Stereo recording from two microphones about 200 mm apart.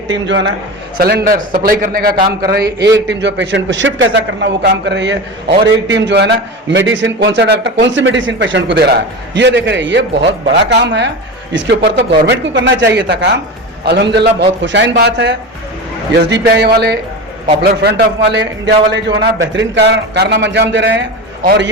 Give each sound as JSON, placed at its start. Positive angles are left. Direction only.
{"t": 0.1, "sound": "a man's voice", "side_deg": -65}
{"t": 0.9, "sound": "a man's voice", "side_deg": -50}